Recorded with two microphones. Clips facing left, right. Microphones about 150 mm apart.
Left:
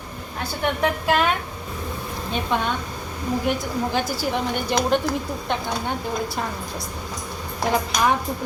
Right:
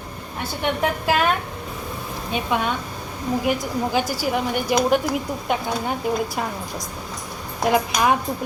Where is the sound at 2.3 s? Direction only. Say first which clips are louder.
Right 1 dB; 5° right (ahead or behind).